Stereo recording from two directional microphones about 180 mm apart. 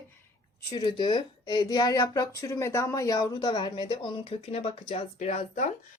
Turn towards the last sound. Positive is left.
turn(degrees=40)  # may be behind; listen again after turning